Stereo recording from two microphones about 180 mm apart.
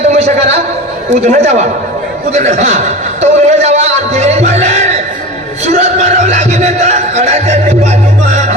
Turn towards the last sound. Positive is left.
turn(degrees=-40)  # may be behind; listen again after turning